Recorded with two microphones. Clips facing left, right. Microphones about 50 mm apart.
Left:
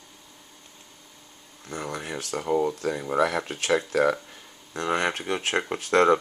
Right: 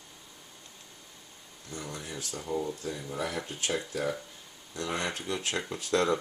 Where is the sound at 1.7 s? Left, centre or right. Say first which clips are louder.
Left 7 dB; left.